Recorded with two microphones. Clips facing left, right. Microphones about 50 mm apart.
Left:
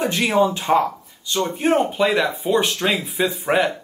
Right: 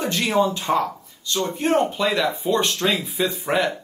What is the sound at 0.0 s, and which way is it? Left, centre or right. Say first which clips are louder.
Speech: left 2 dB; centre.